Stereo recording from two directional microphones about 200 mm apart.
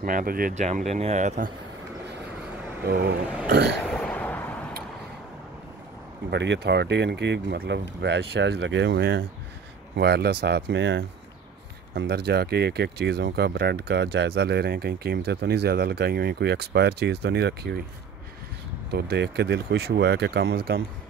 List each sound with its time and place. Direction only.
0.0 s speech: 45° right (ahead or behind)
3.4 s speech: 55° right (ahead or behind)
3.8 s a sound: 5° left (ahead or behind)
6.3 s speech: 60° right (ahead or behind)
18.9 s speech: 55° right (ahead or behind)